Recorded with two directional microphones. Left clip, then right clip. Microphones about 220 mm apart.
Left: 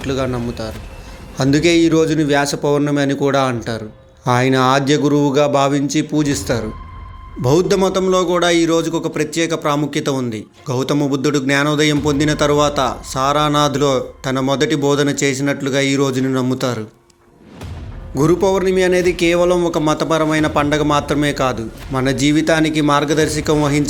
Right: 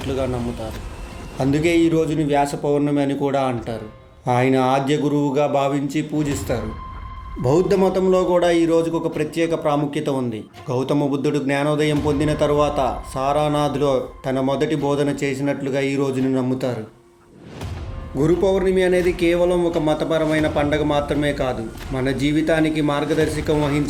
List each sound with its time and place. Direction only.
0.1 s a man's voice: 25° left (ahead or behind)
18.2 s a man's voice: 20° left (ahead or behind)